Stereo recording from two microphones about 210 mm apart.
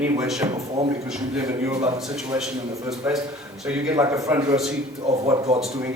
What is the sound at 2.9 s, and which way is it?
Speech, centre (ahead or behind).